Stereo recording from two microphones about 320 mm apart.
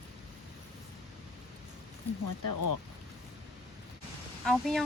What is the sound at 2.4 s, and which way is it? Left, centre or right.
Speech, left.